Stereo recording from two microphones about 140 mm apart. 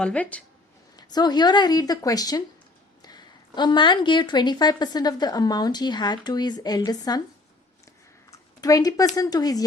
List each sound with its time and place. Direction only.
0.0 s speech: 10° left (ahead or behind)
0.9 s speech: 30° left (ahead or behind)
8.3 s a sound: 25° left (ahead or behind)
9.1 s speech: 25° left (ahead or behind)